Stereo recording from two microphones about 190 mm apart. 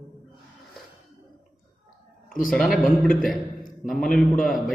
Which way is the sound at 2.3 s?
45° left (ahead or behind).